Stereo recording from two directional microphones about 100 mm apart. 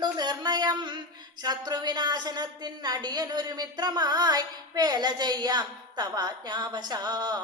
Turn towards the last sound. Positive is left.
turn(degrees=-45)  # may be behind; listen again after turning